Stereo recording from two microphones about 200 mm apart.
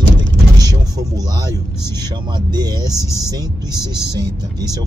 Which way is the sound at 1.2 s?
20° right (ahead or behind).